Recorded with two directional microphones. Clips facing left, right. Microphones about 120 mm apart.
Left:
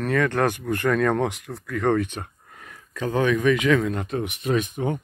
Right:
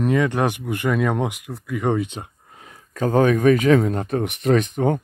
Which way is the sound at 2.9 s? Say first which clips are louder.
Right 5 dB; 40° right (ahead or behind).